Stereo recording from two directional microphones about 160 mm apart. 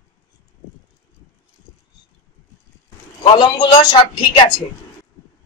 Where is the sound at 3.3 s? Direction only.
30° left (ahead or behind).